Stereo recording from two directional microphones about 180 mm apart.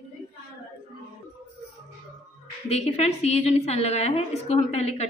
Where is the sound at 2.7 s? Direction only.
35° left (ahead or behind).